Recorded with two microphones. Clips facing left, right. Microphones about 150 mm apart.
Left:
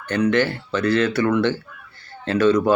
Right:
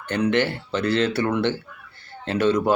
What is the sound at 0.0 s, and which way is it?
Speech, 25° right (ahead or behind).